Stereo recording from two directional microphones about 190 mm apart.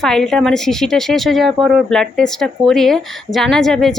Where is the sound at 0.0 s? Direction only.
Centre (ahead or behind).